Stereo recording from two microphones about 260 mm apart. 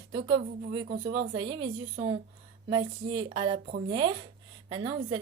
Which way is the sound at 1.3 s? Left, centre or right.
Centre.